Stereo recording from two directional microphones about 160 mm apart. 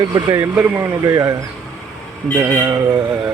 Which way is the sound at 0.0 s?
25° right (ahead or behind).